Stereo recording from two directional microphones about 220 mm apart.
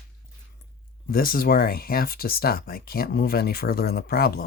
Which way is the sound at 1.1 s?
40° left (ahead or behind).